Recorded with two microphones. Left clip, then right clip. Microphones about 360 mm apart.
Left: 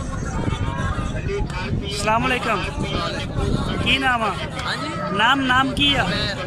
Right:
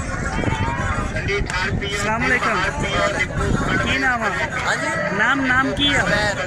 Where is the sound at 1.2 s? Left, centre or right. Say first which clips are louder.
Right 7 dB; right.